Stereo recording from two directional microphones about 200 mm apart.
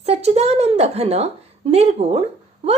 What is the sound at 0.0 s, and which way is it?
A woman's voice, 30° right (ahead or behind).